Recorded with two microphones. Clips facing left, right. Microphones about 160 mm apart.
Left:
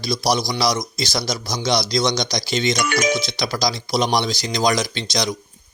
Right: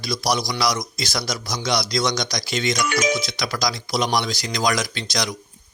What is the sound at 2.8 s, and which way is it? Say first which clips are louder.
Speech: left 1 dB; 60° left (ahead or behind).